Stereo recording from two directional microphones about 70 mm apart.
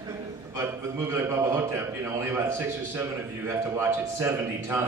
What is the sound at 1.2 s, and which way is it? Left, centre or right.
A man's voice, right.